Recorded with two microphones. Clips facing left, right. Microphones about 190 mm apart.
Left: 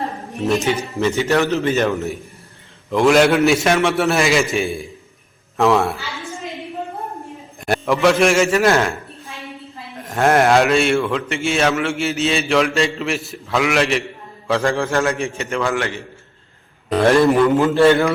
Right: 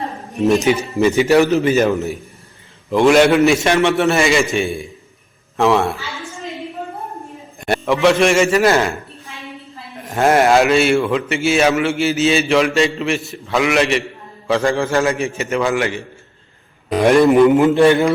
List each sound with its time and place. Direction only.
0.6 s a man's voice: 15° right (ahead or behind)
7.6 s a man's voice: centre (ahead or behind)
10.0 s a man's voice: centre (ahead or behind)